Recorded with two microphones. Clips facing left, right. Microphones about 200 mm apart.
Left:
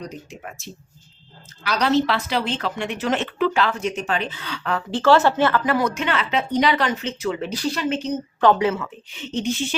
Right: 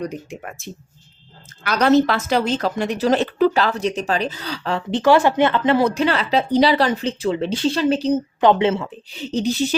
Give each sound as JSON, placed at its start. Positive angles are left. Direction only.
{"t": 0.1, "sound": "a woman's voice", "side_deg": -55}
{"t": 4.9, "sound": "a woman's voice", "side_deg": -15}
{"t": 8.4, "sound": "a woman's voice", "side_deg": -20}